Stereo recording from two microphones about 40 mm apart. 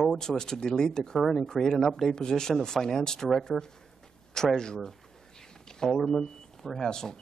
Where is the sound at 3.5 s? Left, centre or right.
Centre.